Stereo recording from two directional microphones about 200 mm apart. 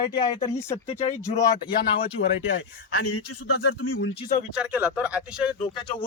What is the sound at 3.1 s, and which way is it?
Speech, 90° left.